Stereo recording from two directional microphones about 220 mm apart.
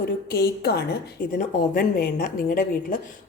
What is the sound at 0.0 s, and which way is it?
A woman's voice, 45° left (ahead or behind).